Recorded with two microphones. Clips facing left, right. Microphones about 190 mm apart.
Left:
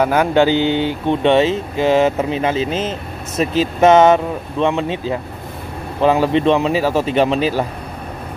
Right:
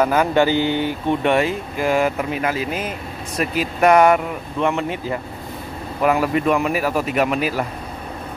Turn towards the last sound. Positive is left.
turn(degrees=25)  # may be behind; listen again after turning